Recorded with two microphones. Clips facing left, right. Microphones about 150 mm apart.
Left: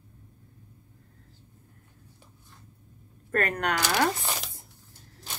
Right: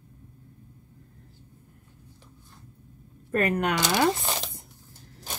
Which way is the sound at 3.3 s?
10° right (ahead or behind).